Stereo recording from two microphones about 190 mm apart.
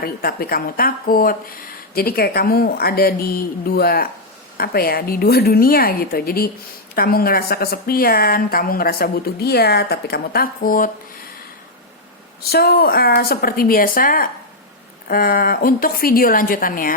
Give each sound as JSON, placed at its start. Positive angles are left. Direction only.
{"t": 0.0, "sound": "speech", "side_deg": 50}
{"t": 12.4, "sound": "speech", "side_deg": 55}